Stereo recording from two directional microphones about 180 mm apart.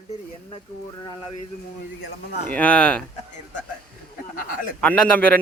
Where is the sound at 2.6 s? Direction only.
5° left (ahead or behind).